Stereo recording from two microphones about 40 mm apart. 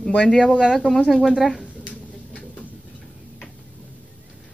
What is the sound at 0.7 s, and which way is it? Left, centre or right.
Speech, centre.